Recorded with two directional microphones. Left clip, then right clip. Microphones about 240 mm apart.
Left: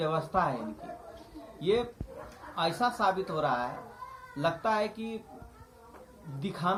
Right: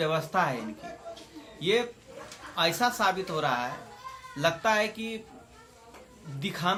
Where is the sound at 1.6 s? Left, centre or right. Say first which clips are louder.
Right 2 dB; right.